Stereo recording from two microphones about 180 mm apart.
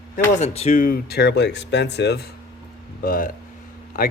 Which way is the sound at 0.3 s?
35° left (ahead or behind).